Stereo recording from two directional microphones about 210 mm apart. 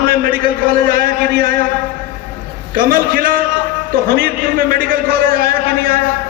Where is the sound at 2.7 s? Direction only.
45° right (ahead or behind).